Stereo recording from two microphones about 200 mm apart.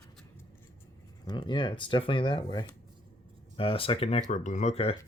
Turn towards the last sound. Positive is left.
turn(degrees=30)  # may be behind; listen again after turning